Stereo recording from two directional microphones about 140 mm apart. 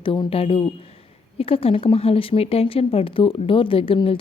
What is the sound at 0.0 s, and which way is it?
Speech, 40° left (ahead or behind).